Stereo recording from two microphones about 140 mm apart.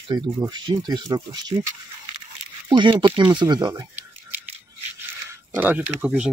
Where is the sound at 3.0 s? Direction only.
35° right (ahead or behind).